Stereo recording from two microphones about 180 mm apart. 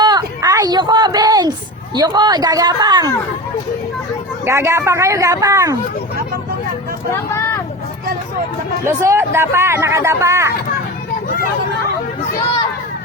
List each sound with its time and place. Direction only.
0.0 s a sound: 25° right (ahead or behind)
2.0 s speech: 25° right (ahead or behind)
4.4 s speech: 15° right (ahead or behind)
7.1 s speech: 15° left (ahead or behind)
8.8 s speech: 15° right (ahead or behind)